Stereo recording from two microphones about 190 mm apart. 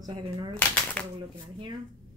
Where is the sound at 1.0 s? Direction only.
5° left (ahead or behind).